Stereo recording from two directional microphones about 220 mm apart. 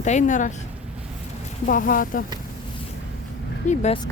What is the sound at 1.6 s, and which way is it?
Speech, 40° left (ahead or behind).